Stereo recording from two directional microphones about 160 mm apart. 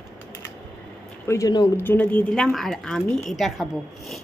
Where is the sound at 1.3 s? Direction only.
20° left (ahead or behind).